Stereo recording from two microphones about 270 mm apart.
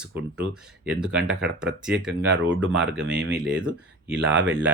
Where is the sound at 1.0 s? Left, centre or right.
Centre.